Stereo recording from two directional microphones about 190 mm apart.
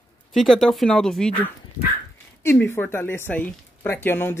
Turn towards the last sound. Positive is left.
turn(degrees=10)  # may be behind; listen again after turning